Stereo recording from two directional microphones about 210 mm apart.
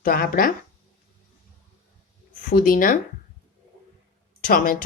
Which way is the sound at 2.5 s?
40° left (ahead or behind).